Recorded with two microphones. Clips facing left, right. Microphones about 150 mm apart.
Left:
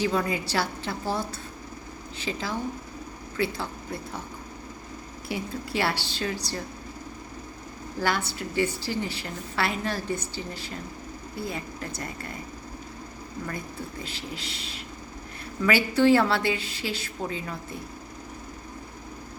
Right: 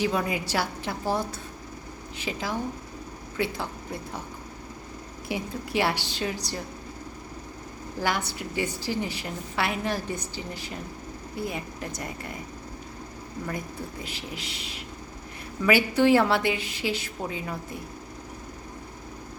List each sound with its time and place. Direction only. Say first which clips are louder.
0.0 s a woman's voice: even; 10° right (ahead or behind)
5.3 s a woman's voice: right 1 dB; 15° right (ahead or behind)
8.0 s a woman's voice: left 1 dB; 15° right (ahead or behind)
14.0 s a woman's voice: even; 15° right (ahead or behind)